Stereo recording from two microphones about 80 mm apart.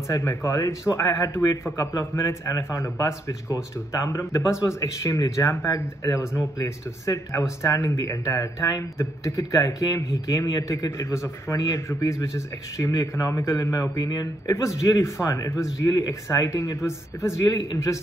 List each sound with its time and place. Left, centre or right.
0.1 s a man's voice: left
13.9 s speech: left
14.5 s a man's voice: left